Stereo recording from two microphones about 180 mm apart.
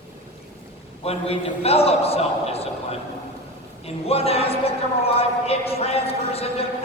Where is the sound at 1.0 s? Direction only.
35° left (ahead or behind).